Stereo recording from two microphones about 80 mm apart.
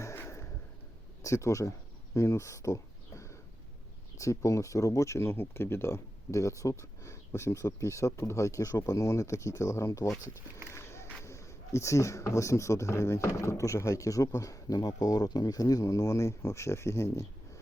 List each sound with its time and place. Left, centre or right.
0.0 s a sound: left
1.2 s speech: left
2.1 s a sound: left
4.2 s speech: left
10.7 s walk: left
11.2 s speech: left